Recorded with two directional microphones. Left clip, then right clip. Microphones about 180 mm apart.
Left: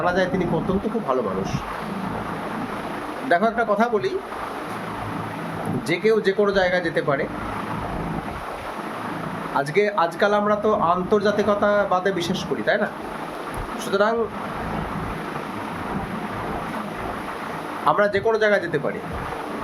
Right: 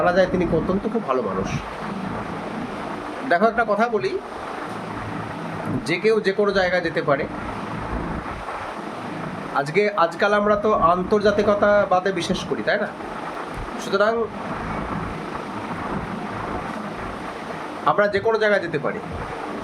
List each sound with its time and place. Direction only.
0.0 s speech: 5° right (ahead or behind)
3.2 s speech: 5° right (ahead or behind)
5.9 s speech: 5° right (ahead or behind)
9.6 s speech: 5° right (ahead or behind)
13.9 s speech: centre (ahead or behind)
17.8 s speech: centre (ahead or behind)